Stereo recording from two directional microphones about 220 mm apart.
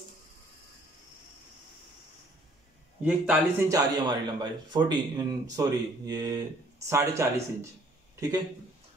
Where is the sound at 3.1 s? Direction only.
10° right (ahead or behind).